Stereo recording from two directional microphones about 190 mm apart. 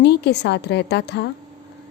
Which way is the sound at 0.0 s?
60° left (ahead or behind).